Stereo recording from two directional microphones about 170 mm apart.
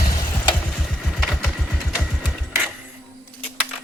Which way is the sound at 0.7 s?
Centre (ahead or behind).